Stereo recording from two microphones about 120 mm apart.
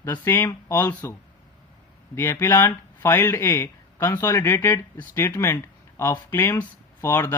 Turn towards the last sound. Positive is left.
turn(degrees=25)  # may be behind; listen again after turning